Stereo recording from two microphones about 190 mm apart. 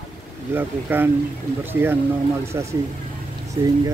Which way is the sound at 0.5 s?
10° right (ahead or behind).